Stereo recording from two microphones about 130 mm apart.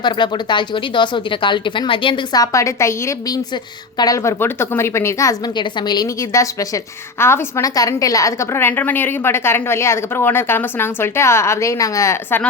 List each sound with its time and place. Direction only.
0.0 s speech: 35° left (ahead or behind)
2.4 s a woman's voice: 25° left (ahead or behind)